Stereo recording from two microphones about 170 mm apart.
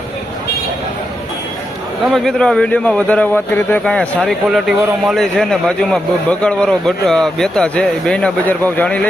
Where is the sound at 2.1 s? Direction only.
5° left (ahead or behind).